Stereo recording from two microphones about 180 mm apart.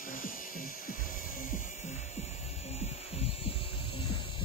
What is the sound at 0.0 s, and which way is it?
Music, 50° left (ahead or behind).